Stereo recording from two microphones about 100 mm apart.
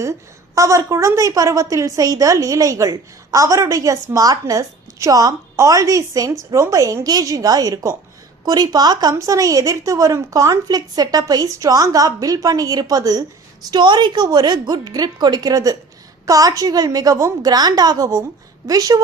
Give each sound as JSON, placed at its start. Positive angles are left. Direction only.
{"t": 0.0, "sound": "a woman's voice", "side_deg": -30}